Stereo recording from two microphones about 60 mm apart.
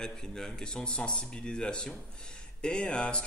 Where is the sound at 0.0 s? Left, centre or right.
Centre.